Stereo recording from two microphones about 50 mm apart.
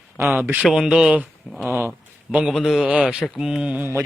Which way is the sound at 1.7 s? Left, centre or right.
Right.